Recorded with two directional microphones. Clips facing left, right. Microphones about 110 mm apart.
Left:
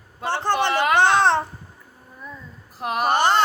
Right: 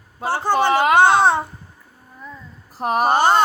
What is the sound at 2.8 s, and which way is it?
Speech, 35° right (ahead or behind).